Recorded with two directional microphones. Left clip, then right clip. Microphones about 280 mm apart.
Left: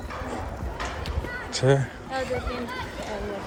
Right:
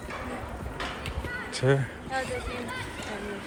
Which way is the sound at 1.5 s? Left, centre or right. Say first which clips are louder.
Left 4 dB; centre.